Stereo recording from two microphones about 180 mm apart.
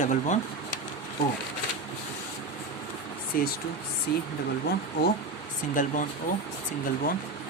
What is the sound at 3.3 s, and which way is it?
Speech, 55° left (ahead or behind).